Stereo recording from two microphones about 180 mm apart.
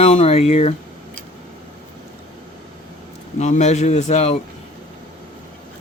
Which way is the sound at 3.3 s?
40° left (ahead or behind).